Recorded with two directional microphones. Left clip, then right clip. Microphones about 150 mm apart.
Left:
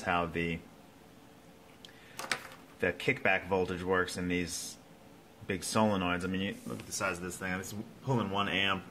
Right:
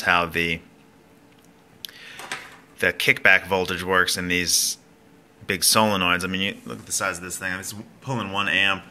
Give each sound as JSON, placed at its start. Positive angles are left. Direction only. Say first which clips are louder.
{"t": 0.0, "sound": "speech", "louder": "right 12 dB", "side_deg": -15}
{"t": 2.8, "sound": "speech", "louder": "right 12 dB", "side_deg": -15}
{"t": 5.5, "sound": "speech", "louder": "right 11 dB", "side_deg": -15}